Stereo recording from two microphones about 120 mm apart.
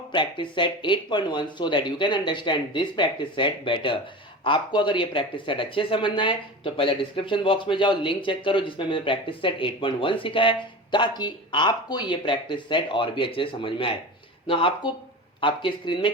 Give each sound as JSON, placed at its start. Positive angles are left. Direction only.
{"t": 0.1, "sound": "speech", "side_deg": 40}